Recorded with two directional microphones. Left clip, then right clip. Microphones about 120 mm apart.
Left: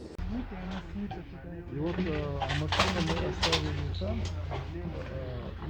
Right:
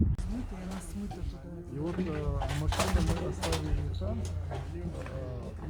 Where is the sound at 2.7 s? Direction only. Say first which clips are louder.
Left 4 dB; 65° right (ahead or behind).